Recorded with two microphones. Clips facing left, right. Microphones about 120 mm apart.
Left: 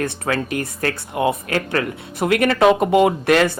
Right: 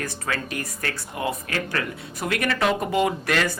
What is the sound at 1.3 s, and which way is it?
Speech, 50° left (ahead or behind).